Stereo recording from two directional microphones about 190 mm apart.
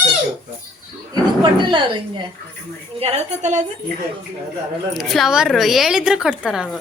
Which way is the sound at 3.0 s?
35° right (ahead or behind).